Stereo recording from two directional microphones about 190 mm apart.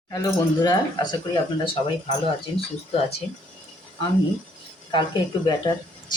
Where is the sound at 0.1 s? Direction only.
20° left (ahead or behind).